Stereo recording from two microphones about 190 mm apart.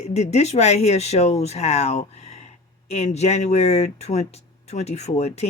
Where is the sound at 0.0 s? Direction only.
35° left (ahead or behind).